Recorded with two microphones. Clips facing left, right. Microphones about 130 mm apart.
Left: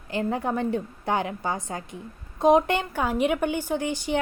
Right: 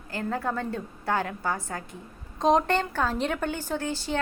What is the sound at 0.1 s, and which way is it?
A woman's voice, 20° left (ahead or behind).